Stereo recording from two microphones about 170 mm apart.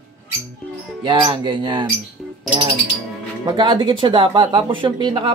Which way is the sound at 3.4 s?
25° right (ahead or behind).